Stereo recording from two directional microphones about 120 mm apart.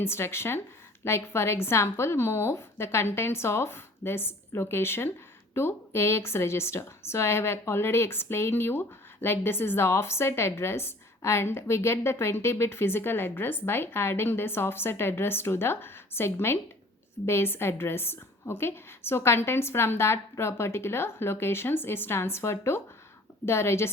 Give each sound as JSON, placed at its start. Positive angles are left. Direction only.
{"t": 0.0, "sound": "speech", "side_deg": 20}